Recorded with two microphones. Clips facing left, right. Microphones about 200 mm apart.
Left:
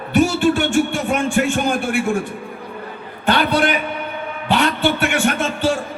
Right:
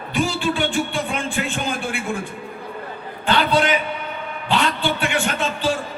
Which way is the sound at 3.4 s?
45° left (ahead or behind).